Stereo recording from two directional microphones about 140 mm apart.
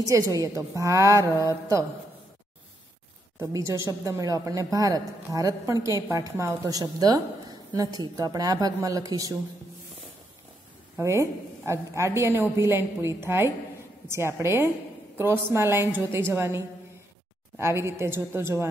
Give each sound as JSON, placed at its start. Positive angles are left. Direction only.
{"t": 0.1, "sound": "a woman's voice", "side_deg": -25}
{"t": 3.5, "sound": "a woman's voice", "side_deg": -20}
{"t": 11.0, "sound": "a woman's voice", "side_deg": -20}